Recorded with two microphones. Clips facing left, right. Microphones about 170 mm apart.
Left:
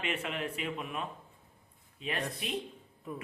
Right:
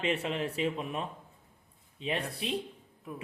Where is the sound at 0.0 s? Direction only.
30° right (ahead or behind).